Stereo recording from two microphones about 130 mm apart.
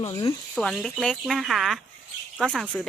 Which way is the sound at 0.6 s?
5° left (ahead or behind).